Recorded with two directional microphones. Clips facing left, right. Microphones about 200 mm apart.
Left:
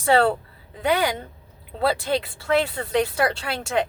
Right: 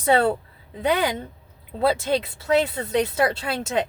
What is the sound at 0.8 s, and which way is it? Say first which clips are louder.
Speech: even; 20° right (ahead or behind).